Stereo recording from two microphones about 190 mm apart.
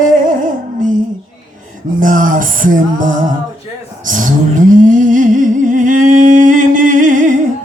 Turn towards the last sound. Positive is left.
turn(degrees=-45)  # may be behind; listen again after turning